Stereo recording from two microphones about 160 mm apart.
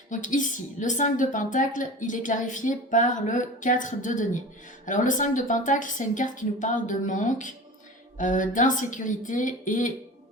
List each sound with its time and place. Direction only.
0.1 s a woman's voice: 55° left (ahead or behind)